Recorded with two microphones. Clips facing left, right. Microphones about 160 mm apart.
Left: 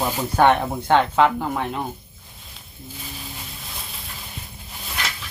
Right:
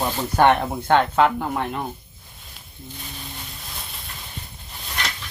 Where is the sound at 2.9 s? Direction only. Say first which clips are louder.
Left 1 dB; centre (ahead or behind).